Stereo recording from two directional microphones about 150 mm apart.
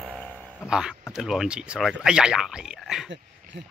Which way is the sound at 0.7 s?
5° right (ahead or behind).